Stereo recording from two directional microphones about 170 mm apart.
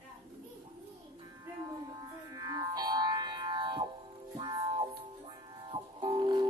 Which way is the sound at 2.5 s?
25° right (ahead or behind).